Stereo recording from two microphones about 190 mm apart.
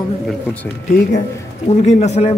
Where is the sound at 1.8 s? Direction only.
35° left (ahead or behind).